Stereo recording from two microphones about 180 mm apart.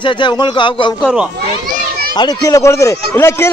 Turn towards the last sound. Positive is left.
turn(degrees=15)  # may be behind; listen again after turning